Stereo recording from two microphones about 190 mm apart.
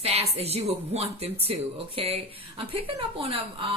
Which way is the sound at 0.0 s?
30° right (ahead or behind).